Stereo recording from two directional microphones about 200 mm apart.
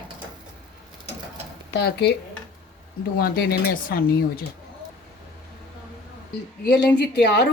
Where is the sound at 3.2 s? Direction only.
50° left (ahead or behind).